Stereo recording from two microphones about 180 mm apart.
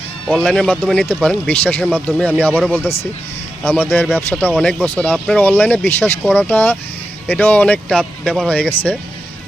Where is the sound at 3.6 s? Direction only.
10° left (ahead or behind).